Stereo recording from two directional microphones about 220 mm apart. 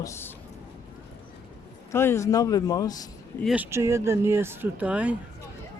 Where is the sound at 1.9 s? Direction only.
10° left (ahead or behind).